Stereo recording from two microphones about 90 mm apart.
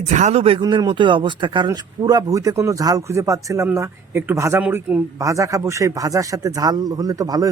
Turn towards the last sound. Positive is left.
turn(degrees=-45)  # may be behind; listen again after turning